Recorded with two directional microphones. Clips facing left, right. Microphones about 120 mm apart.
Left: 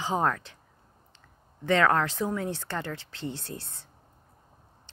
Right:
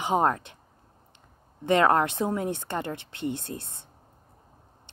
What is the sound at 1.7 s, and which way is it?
Speech, 20° right (ahead or behind).